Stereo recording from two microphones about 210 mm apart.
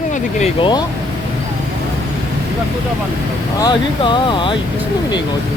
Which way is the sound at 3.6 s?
20° left (ahead or behind).